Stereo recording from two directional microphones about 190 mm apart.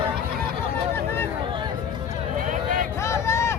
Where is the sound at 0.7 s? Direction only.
10° left (ahead or behind).